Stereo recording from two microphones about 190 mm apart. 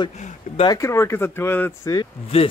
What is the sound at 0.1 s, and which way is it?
Speech, 35° left (ahead or behind).